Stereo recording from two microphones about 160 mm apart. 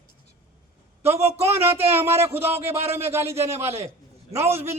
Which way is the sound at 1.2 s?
40° right (ahead or behind).